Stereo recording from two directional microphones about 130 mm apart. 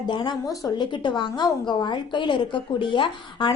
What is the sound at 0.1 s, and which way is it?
A woman's voice, 35° left (ahead or behind).